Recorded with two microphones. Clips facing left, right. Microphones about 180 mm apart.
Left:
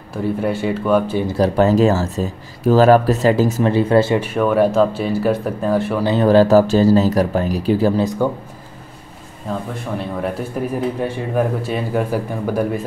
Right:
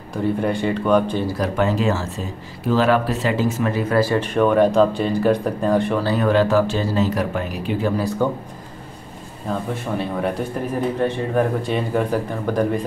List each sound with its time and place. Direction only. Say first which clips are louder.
0.1 s speech: left 1 dB; 5° left (ahead or behind)
1.4 s speech: left 8 dB; 40° left (ahead or behind)
4.2 s speech: even; 5° left (ahead or behind)
6.0 s speech: left 9 dB; 30° left (ahead or behind)
8.0 s speech: left 3 dB; 15° left (ahead or behind)
9.5 s speech: even; centre (ahead or behind)